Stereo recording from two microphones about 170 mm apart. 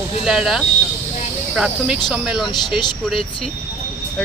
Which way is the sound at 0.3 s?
Centre (ahead or behind).